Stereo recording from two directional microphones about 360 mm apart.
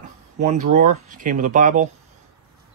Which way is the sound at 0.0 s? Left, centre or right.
Centre.